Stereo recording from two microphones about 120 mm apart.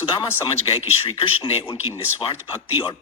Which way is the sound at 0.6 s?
55° left (ahead or behind).